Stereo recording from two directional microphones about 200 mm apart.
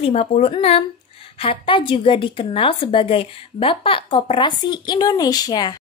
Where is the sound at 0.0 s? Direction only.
30° left (ahead or behind).